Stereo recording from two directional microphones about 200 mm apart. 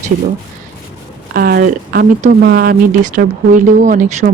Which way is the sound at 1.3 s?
50° right (ahead or behind).